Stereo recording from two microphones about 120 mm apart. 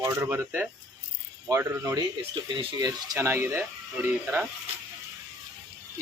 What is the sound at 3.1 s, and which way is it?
Speech, 20° right (ahead or behind).